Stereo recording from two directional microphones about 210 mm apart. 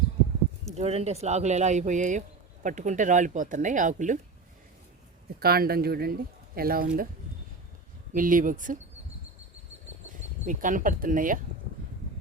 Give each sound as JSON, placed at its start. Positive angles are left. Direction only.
{"t": 0.8, "sound": "speech", "side_deg": -30}
{"t": 5.4, "sound": "speech", "side_deg": -45}
{"t": 8.1, "sound": "speech", "side_deg": -40}
{"t": 10.1, "sound": "speech", "side_deg": -40}